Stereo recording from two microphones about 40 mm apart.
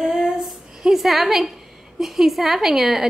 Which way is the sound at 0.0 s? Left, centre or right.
Centre.